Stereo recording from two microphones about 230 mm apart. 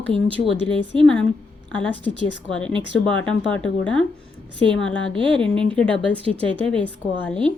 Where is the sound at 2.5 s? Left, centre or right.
Centre.